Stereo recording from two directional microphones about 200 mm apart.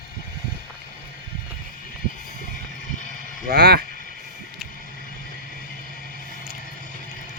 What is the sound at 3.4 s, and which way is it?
Speech, 50° right (ahead or behind).